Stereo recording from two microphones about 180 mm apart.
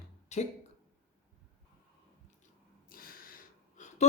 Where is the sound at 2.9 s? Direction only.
55° left (ahead or behind).